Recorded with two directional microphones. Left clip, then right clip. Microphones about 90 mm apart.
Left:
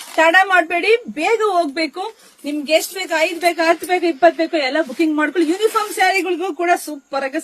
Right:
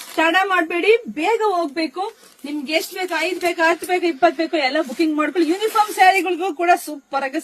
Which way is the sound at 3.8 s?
40° left (ahead or behind).